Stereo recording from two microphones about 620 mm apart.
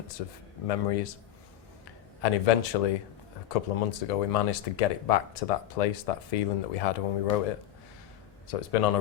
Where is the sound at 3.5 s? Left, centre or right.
Left.